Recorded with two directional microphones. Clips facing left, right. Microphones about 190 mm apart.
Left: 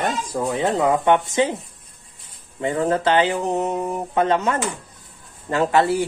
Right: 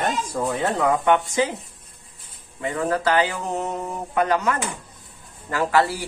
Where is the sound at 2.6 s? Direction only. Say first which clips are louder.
Left 3 dB; 25° left (ahead or behind).